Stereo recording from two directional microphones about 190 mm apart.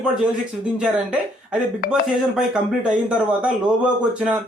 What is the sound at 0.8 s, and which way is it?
A man's voice, 5° right (ahead or behind).